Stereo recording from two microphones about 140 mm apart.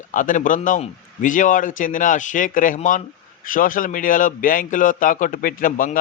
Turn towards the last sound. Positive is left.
turn(degrees=75)  # may be behind; listen again after turning